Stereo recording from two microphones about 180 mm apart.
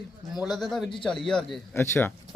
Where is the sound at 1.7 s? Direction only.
15° left (ahead or behind).